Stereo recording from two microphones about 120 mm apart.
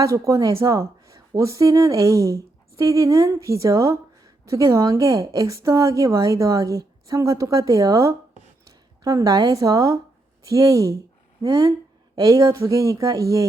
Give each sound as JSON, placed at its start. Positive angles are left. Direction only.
{"t": 0.0, "sound": "a woman's voice", "side_deg": -25}